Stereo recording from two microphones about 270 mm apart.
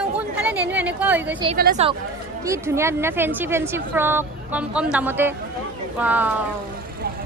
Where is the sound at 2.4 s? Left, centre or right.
Centre.